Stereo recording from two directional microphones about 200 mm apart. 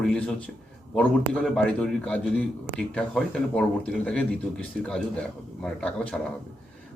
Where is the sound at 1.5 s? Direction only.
5° left (ahead or behind).